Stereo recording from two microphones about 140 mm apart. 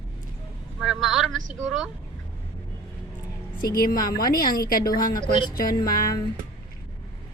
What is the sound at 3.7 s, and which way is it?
A woman's voice, 90° left.